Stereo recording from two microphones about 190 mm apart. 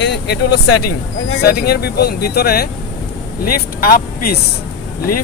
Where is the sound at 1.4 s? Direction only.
55° left (ahead or behind).